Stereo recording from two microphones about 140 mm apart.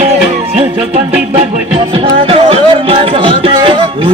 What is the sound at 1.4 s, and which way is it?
Music, 40° right (ahead or behind).